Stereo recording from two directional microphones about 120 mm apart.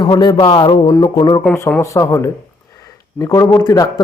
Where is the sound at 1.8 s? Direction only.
25° left (ahead or behind).